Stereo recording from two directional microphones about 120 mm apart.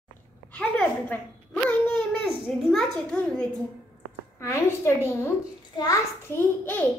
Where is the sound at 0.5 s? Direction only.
10° left (ahead or behind).